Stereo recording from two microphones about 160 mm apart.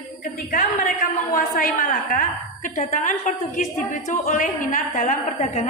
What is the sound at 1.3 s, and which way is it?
A woman's voice, 55° left (ahead or behind).